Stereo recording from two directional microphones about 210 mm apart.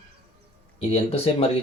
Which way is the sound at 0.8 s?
30° left (ahead or behind).